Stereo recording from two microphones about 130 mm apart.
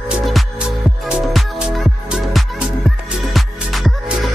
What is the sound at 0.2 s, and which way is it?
Music, centre (ahead or behind).